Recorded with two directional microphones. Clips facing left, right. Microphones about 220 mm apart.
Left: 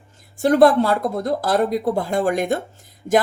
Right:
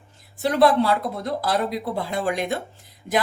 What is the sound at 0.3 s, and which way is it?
Speech, 45° left (ahead or behind).